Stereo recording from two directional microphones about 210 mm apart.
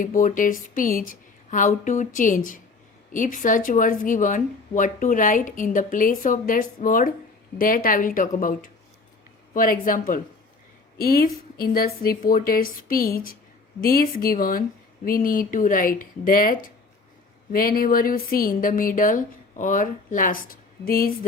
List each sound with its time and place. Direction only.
0.0 s a woman's voice: 40° left (ahead or behind)